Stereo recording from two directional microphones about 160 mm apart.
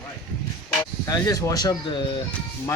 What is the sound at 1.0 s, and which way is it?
Speech, 20° left (ahead or behind).